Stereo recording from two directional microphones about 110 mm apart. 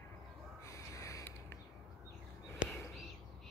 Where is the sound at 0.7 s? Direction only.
30° left (ahead or behind).